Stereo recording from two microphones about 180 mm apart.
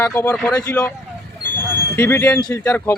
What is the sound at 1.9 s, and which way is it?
Speech, 15° left (ahead or behind).